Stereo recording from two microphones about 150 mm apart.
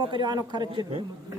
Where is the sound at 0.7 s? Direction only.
40° right (ahead or behind).